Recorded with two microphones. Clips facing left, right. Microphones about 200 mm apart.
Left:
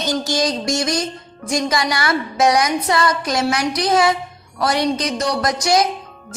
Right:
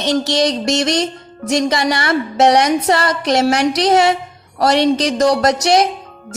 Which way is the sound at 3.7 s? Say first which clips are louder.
Right 3 dB; 75° right (ahead or behind).